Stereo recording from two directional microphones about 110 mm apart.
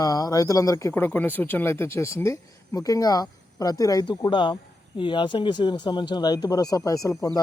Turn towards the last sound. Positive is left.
turn(degrees=35)  # may be behind; listen again after turning